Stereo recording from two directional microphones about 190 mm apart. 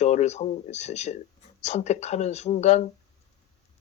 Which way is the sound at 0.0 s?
35° left (ahead or behind).